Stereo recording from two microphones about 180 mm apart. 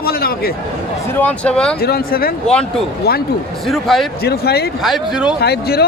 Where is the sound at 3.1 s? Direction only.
60° left (ahead or behind).